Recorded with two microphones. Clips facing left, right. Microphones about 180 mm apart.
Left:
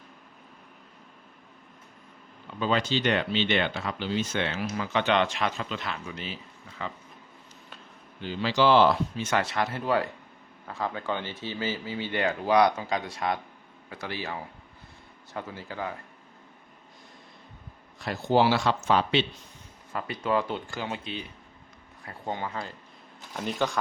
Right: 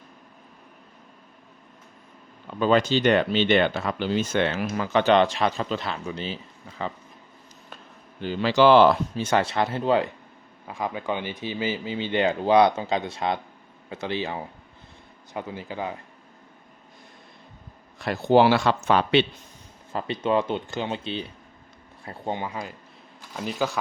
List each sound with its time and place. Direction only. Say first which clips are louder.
2.6 s speech: right 6 dB; 50° right (ahead or behind); by 6.9 s 30° right (ahead or behind)
8.2 s speech: right 5 dB; 55° right (ahead or behind)
9.1 s speech: right 4 dB; 30° right (ahead or behind)
18.0 s speech: right 5 dB; 60° right (ahead or behind)
19.9 s speech: right 4 dB; 25° right (ahead or behind)
22.0 s speech: right 3 dB; 20° right (ahead or behind)
23.3 s speech: right 1 dB; 5° right (ahead or behind)